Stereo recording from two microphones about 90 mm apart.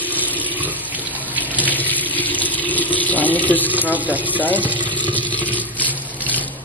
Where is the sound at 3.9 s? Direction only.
20° right (ahead or behind).